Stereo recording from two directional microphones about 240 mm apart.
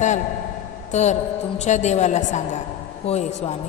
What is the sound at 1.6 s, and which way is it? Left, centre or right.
A woman's voice, left.